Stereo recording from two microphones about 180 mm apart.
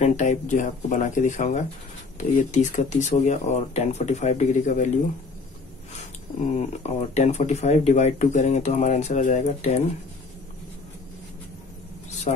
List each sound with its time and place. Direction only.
0.0 s speech: 45° left (ahead or behind)
6.5 s speech: 40° left (ahead or behind)